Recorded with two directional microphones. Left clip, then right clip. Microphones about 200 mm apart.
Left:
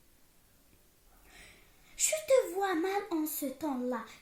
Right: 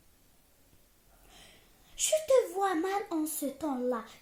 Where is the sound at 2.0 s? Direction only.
40° right (ahead or behind).